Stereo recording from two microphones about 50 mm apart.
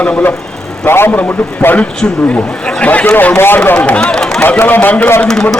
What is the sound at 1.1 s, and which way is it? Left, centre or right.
Speech, left.